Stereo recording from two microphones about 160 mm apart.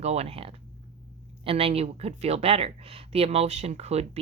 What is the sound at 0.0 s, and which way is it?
Speech, 40° right (ahead or behind).